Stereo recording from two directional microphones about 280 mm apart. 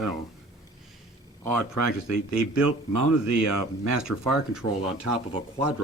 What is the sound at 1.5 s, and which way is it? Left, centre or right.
Speech, right.